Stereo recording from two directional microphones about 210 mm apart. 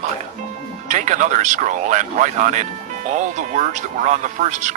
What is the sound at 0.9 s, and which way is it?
Speech, 35° right (ahead or behind).